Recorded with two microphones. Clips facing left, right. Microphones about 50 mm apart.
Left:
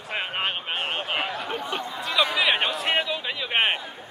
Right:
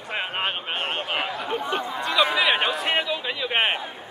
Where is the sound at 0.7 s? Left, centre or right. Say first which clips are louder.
Right 1 dB; right.